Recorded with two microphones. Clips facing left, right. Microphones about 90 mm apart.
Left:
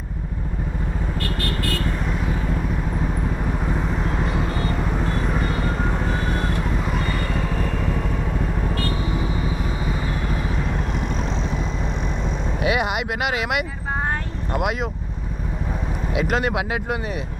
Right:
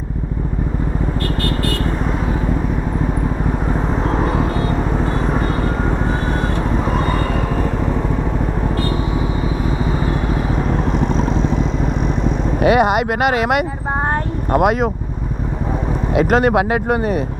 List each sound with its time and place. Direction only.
4.2 s vehicle: 40° right (ahead or behind)
6.9 s vehicle: 35° right (ahead or behind)
12.6 s a sound: 45° right (ahead or behind)
14.5 s speech: 45° right (ahead or behind)
16.1 s speech: 45° right (ahead or behind)